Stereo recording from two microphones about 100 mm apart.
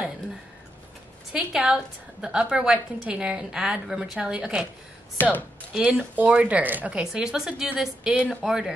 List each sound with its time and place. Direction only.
1.3 s a woman's voice: 5° right (ahead or behind)
5.1 s speech: 15° left (ahead or behind)
5.7 s a woman's voice: 5° right (ahead or behind)